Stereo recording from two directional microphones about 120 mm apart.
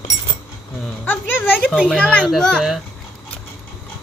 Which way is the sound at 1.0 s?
15° left (ahead or behind).